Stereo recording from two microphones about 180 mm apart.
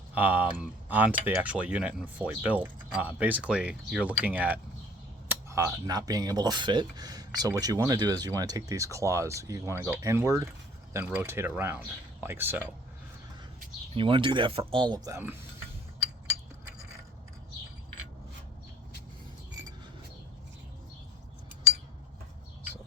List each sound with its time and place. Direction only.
0.1 s speech: 10° right (ahead or behind)
13.9 s speech: 30° right (ahead or behind)